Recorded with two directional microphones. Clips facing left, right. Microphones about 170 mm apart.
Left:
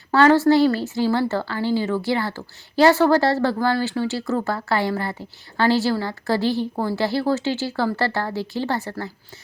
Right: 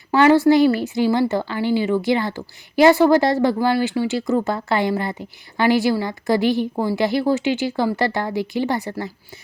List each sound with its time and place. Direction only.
0.1 s a woman's voice: 15° right (ahead or behind)